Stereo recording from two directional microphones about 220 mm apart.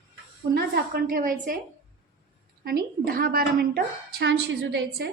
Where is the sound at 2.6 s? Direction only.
45° right (ahead or behind).